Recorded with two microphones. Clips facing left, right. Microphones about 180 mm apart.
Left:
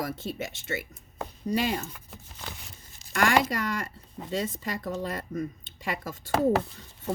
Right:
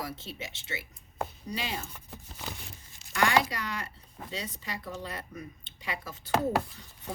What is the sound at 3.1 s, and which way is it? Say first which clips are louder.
Speech: left 2 dB; 50° left (ahead or behind).